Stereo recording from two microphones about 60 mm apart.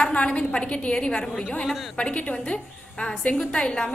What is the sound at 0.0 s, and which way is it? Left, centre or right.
A woman's voice, centre.